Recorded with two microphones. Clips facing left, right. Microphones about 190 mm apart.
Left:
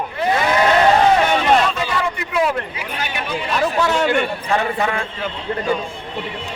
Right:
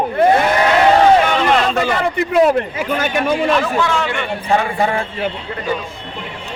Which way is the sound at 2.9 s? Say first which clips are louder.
Right 10 dB; 50° right (ahead or behind).